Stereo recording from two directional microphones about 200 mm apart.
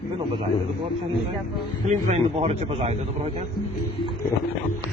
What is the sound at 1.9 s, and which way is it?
A man's voice, 35° right (ahead or behind).